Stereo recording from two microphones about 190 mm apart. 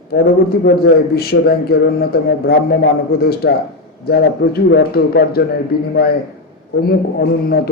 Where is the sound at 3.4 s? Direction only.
75° left (ahead or behind).